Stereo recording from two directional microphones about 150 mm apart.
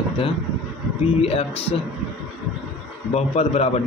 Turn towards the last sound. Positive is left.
turn(degrees=45)  # may be behind; listen again after turning